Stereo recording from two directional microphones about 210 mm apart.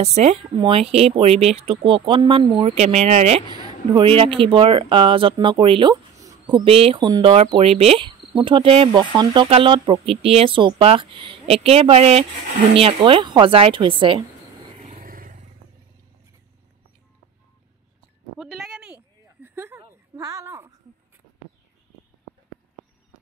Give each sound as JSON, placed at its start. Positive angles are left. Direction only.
{"t": 0.0, "sound": "speech", "side_deg": -30}
{"t": 14.8, "sound": "vehicle", "side_deg": -40}
{"t": 18.4, "sound": "a sound", "side_deg": 0}